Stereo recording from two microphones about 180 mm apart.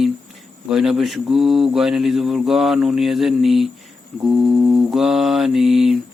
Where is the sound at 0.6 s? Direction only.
Centre (ahead or behind).